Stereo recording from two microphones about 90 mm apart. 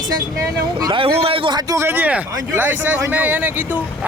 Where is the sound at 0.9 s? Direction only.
80° right.